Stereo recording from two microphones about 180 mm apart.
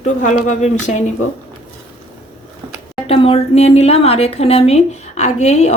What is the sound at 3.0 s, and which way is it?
A woman's voice, 30° left (ahead or behind).